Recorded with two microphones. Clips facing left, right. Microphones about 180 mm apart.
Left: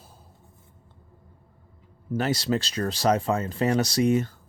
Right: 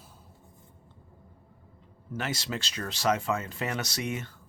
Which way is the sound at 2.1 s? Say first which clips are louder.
Left 9 dB; 35° left (ahead or behind).